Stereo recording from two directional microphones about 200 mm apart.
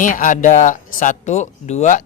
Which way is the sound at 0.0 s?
40° left (ahead or behind).